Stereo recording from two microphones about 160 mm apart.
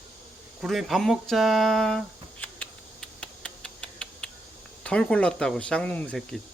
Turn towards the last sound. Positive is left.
turn(degrees=5)  # may be behind; listen again after turning